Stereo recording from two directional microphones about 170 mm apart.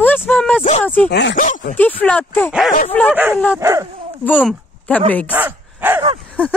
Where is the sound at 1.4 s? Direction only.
50° left (ahead or behind).